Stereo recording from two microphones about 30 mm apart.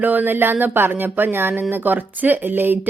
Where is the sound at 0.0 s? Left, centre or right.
Right.